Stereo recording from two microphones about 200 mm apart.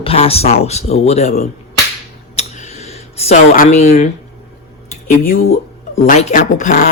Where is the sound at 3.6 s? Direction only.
40° left (ahead or behind).